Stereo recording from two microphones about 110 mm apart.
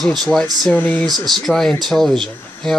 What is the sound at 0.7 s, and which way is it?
Speech, 15° left (ahead or behind).